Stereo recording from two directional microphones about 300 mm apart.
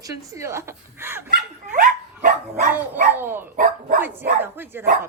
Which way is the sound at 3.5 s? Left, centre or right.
Right.